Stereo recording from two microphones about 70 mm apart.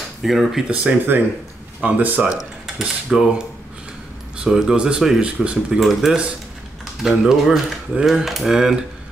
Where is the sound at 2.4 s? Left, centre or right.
Centre.